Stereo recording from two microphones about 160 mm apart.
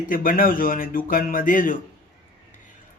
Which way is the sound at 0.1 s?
60° left (ahead or behind).